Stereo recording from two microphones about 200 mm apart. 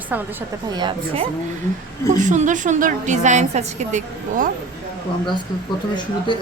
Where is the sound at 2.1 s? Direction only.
40° right (ahead or behind).